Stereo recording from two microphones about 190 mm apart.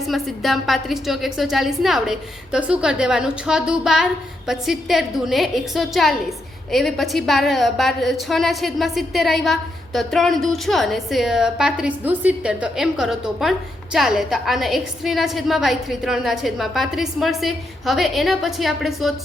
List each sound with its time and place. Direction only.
0.1 s a woman's voice: centre (ahead or behind)